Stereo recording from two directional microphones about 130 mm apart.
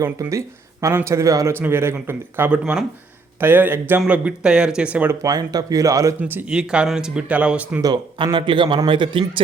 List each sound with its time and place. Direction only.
0.0 s speech: 25° right (ahead or behind)
5.2 s speech: 30° right (ahead or behind)
6.1 s speech: 15° right (ahead or behind)
7.8 s a man's voice: 30° right (ahead or behind)